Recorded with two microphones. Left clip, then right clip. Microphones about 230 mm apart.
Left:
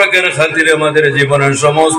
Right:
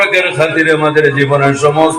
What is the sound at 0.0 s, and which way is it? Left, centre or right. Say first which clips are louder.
A man's voice: left 1 dB; left.